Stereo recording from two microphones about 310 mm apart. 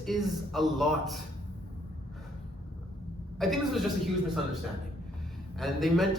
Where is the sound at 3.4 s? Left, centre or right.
Centre.